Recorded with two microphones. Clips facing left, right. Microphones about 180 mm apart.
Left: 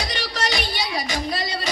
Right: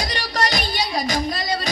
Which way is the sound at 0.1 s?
40° right (ahead or behind).